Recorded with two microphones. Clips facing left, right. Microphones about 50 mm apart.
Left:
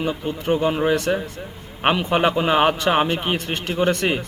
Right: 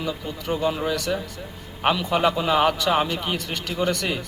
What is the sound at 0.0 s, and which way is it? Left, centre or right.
A man's voice, left.